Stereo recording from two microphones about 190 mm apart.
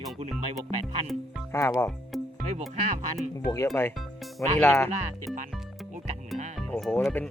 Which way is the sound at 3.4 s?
15° left (ahead or behind).